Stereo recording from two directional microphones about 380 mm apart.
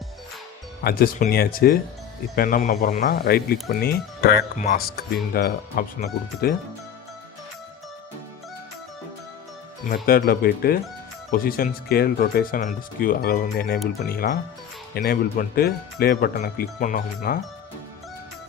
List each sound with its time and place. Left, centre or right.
0.9 s speech: left
9.9 s speech: left